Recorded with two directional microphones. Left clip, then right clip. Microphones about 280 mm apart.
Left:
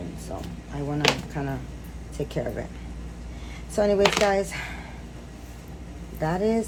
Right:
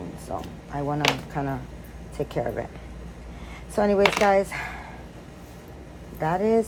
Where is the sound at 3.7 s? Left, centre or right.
Centre.